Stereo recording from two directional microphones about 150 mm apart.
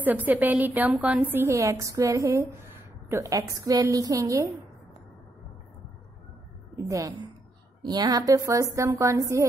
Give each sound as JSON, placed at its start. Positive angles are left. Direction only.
{"t": 0.0, "sound": "a woman's voice", "side_deg": -10}
{"t": 6.9, "sound": "a woman's voice", "side_deg": -20}